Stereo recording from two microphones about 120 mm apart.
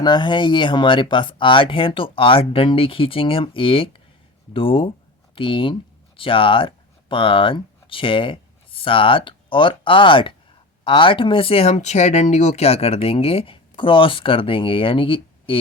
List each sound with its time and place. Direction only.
0.0 s speech: 40° left (ahead or behind)